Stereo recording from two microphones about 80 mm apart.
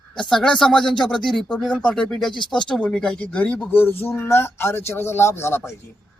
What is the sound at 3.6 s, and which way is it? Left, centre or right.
Speech, left.